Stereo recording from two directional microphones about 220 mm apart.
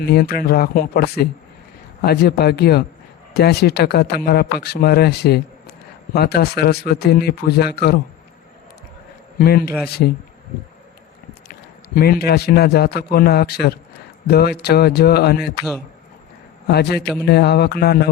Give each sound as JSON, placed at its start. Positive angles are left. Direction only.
{"t": 0.0, "sound": "speech", "side_deg": 45}
{"t": 9.4, "sound": "speech", "side_deg": 45}
{"t": 11.9, "sound": "speech", "side_deg": 45}
{"t": 16.6, "sound": "speech", "side_deg": 45}